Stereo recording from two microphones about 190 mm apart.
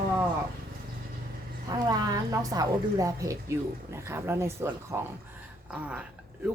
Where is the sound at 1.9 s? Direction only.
20° right (ahead or behind).